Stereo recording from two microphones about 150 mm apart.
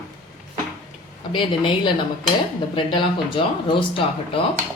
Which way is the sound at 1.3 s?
35° left (ahead or behind).